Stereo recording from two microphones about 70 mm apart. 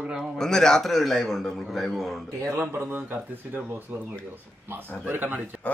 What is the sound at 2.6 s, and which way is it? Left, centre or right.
Speech, right.